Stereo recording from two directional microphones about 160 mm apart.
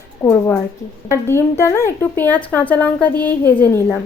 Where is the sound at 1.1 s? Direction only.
15° left (ahead or behind).